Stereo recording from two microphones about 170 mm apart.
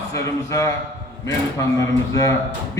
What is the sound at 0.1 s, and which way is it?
Speech, 15° left (ahead or behind).